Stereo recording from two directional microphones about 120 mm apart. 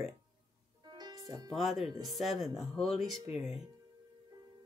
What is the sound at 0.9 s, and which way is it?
Music, 35° right (ahead or behind).